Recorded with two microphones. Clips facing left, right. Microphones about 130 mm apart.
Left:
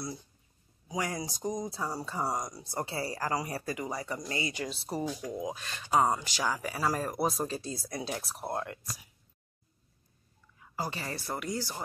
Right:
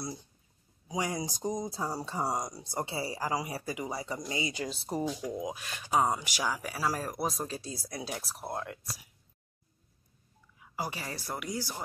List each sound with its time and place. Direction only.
0.0 s speech: 25° right (ahead or behind)
4.6 s speech: 30° right (ahead or behind)
4.8 s speech: 5° left (ahead or behind)
5.1 s speech: 5° right (ahead or behind)
10.6 s speech: 10° right (ahead or behind)